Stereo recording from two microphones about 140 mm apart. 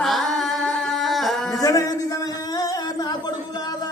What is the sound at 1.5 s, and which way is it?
Speech, 25° left (ahead or behind).